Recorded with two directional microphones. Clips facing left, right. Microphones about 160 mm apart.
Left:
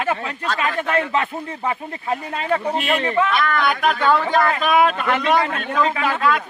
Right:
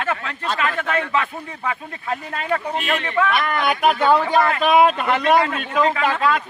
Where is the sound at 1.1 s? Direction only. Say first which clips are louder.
Left 1 dB; 30° left (ahead or behind).